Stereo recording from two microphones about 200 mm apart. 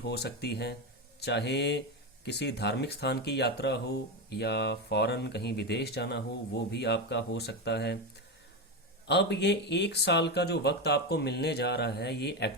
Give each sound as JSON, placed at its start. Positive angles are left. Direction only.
{"t": 0.0, "sound": "speech", "side_deg": 55}
{"t": 9.0, "sound": "speech", "side_deg": 60}